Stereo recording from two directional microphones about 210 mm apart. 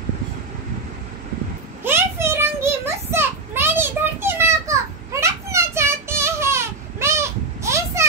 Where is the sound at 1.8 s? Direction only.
10° right (ahead or behind).